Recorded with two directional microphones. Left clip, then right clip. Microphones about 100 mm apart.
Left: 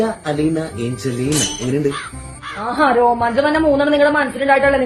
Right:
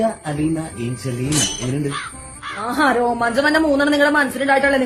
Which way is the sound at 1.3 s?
Centre (ahead or behind).